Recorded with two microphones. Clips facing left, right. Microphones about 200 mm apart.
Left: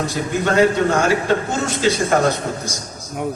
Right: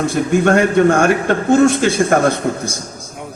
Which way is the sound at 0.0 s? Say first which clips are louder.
Right 6 dB; 50° right (ahead or behind).